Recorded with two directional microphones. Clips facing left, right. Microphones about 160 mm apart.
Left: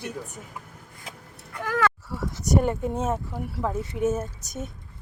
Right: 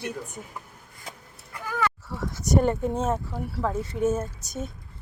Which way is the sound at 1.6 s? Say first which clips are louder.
Left 3 dB; 80° left.